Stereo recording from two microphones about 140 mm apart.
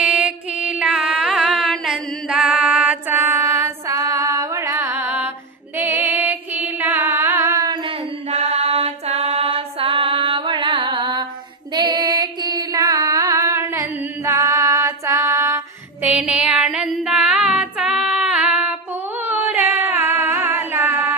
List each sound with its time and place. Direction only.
0.0 s mantra: 5° right (ahead or behind)
5.7 s music: 15° right (ahead or behind)
7.9 s a sound: 50° right (ahead or behind)
11.7 s carnatic music: 30° right (ahead or behind); by 18.8 s 10° right (ahead or behind)
19.5 s a capella: 15° right (ahead or behind)